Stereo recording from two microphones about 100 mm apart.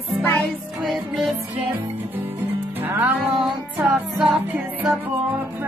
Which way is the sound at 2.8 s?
15° right (ahead or behind).